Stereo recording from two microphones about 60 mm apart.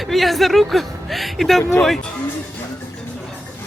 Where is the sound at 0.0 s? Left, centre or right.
Centre.